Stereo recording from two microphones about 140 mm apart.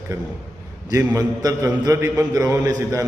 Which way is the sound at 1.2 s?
25° right (ahead or behind).